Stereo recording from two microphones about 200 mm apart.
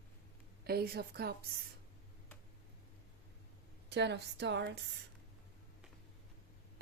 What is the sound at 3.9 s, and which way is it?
Speech, 60° right (ahead or behind).